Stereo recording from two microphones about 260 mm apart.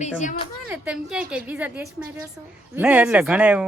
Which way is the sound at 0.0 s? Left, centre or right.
Left.